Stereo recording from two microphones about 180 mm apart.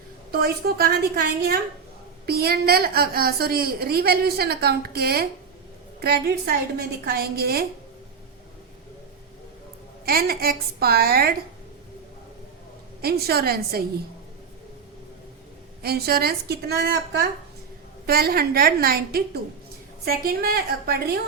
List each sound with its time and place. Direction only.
0.3 s a woman's voice: 60° right (ahead or behind)
10.1 s a woman's voice: 55° right (ahead or behind)
13.0 s a woman's voice: 60° right (ahead or behind)
15.8 s a woman's voice: 60° right (ahead or behind)